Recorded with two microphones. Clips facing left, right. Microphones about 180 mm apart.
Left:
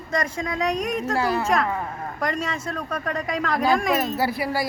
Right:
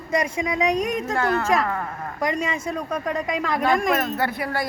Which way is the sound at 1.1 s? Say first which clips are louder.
Right 1 dB; 10° left (ahead or behind).